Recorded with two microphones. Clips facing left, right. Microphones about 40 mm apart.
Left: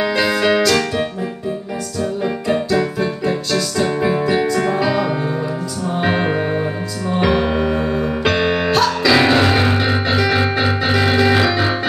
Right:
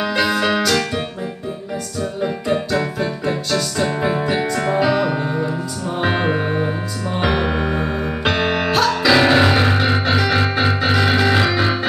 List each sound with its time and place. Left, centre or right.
0.1 s music: centre
2.2 s music: centre
5.9 s music: centre